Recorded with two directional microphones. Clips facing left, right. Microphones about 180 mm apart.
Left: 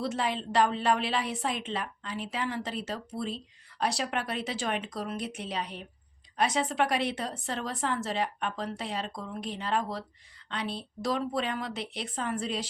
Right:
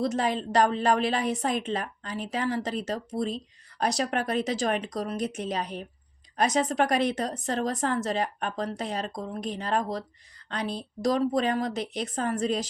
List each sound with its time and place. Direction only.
0.0 s a woman's voice: 40° right (ahead or behind)